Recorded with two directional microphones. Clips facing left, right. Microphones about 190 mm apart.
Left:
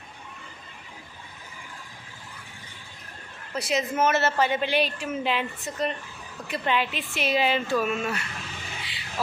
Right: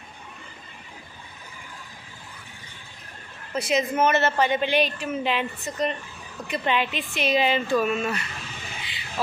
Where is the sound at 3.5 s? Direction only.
Centre (ahead or behind).